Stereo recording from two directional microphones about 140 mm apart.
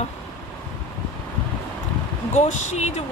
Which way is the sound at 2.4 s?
55° left (ahead or behind).